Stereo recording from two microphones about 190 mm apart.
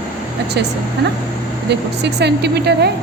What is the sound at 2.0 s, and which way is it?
Speech, 60° right (ahead or behind).